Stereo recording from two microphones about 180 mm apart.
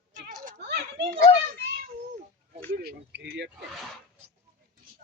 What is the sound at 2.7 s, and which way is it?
Speech, 60° right (ahead or behind).